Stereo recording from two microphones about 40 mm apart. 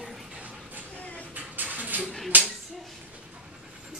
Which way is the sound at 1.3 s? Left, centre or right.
Right.